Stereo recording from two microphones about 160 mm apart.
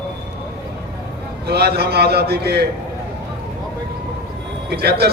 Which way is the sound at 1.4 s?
80° right.